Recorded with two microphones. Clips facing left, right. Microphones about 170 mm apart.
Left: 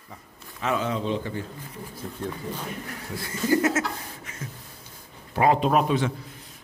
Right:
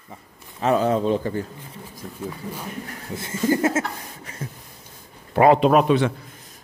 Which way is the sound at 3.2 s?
25° right (ahead or behind).